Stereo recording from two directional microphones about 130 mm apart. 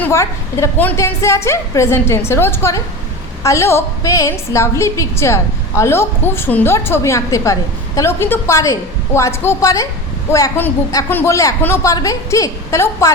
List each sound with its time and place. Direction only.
0.0 s a woman's voice: 20° left (ahead or behind)
11.1 s a woman's voice: 20° left (ahead or behind)